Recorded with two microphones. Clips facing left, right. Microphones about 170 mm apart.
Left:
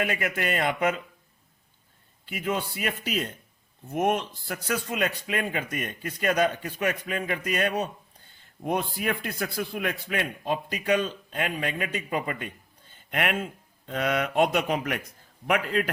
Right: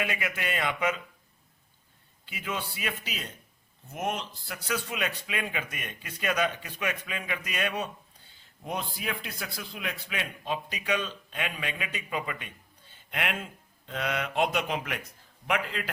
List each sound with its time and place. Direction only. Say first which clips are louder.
0.0 s speech: left 4 dB; 40° left (ahead or behind)
2.3 s speech: left 6 dB; 45° left (ahead or behind)
8.6 s speech: left 7 dB; 55° left (ahead or behind)